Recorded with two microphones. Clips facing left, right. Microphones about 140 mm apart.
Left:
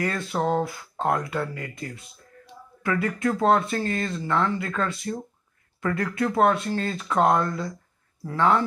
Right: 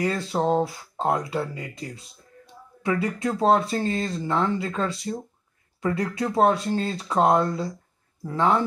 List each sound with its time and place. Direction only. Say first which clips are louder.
0.1 s speech: right 2 dB; 25° right (ahead or behind)
8.3 s speech: even; 20° right (ahead or behind)